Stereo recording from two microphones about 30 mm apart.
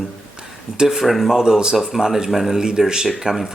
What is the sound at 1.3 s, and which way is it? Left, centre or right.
Speech, centre.